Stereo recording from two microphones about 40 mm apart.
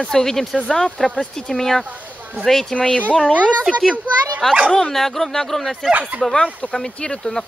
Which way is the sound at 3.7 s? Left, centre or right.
Centre.